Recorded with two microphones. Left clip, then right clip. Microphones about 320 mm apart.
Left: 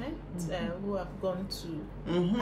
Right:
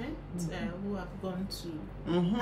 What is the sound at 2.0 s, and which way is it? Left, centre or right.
Speech, centre.